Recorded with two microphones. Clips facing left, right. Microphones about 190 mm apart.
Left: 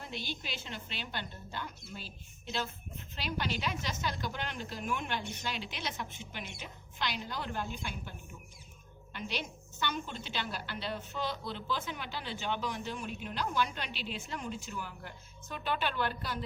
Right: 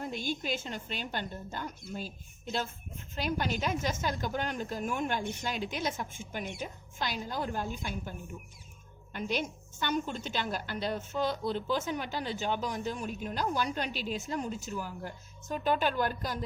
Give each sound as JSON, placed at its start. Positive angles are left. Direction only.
{"t": 0.0, "sound": "a woman's voice", "side_deg": -45}
{"t": 9.1, "sound": "a woman's voice", "side_deg": -45}